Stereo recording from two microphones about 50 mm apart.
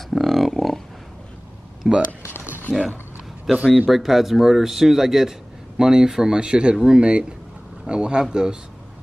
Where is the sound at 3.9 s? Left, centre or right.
Centre.